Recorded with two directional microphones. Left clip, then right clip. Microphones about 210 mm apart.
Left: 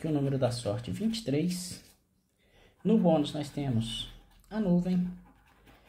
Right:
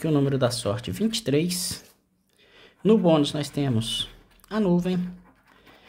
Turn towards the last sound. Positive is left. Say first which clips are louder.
# right 7 dB
turn(degrees=-30)  # may be behind; listen again after turning